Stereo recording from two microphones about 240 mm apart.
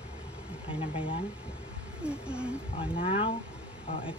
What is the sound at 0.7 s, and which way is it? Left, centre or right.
Speech, left.